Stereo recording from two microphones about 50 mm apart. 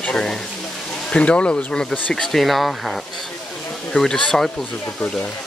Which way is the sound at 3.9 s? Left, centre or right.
Centre.